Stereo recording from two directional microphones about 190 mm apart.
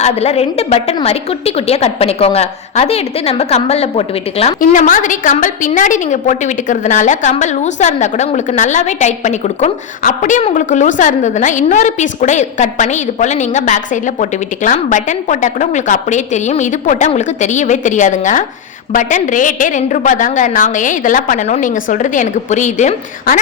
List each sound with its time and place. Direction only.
0.0 s a woman's voice: 35° left (ahead or behind)